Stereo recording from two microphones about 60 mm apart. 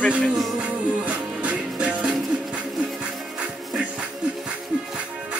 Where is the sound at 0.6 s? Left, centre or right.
Right.